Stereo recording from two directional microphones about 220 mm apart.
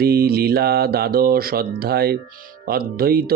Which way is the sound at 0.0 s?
45° right (ahead or behind).